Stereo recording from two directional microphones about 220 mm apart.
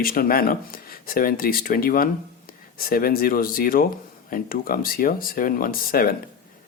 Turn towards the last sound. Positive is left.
turn(degrees=40)  # may be behind; listen again after turning